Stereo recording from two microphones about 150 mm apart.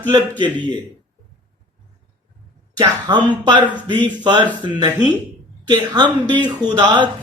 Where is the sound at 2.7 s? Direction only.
25° right (ahead or behind).